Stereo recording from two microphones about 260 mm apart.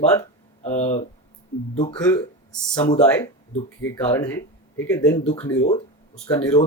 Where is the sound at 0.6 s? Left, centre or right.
Left.